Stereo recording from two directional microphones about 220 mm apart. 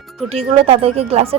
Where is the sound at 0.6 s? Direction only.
25° right (ahead or behind).